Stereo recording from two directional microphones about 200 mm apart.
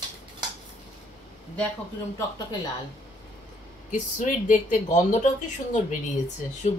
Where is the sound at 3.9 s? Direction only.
40° left (ahead or behind).